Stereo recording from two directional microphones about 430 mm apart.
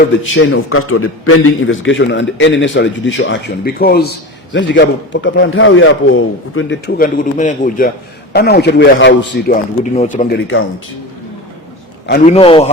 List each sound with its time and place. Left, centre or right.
0.3 s a man's voice: left
12.0 s a man's voice: centre